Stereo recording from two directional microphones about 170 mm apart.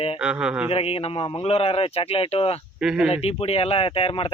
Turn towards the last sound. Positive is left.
turn(degrees=30)  # may be behind; listen again after turning